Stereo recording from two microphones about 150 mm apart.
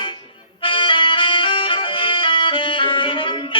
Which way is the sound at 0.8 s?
35° left (ahead or behind).